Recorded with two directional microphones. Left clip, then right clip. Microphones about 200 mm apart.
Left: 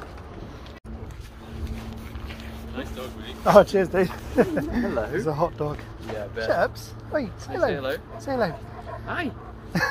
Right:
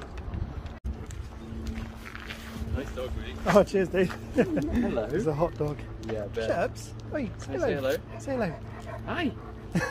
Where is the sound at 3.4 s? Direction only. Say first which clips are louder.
Left 6 dB; 5° left (ahead or behind).